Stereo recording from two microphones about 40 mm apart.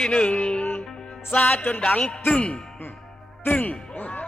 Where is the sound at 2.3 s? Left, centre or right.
Left.